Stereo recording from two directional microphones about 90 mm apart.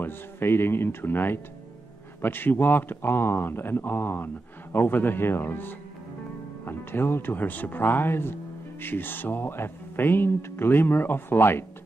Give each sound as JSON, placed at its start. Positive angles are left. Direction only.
{"t": 0.0, "sound": "speech", "side_deg": 25}